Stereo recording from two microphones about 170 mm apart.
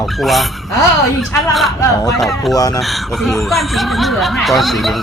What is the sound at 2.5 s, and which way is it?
Speech, 20° left (ahead or behind).